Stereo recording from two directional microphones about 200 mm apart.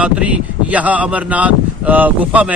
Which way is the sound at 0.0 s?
5° right (ahead or behind).